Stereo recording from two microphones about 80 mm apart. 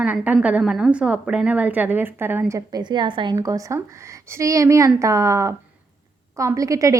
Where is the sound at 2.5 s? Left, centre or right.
Right.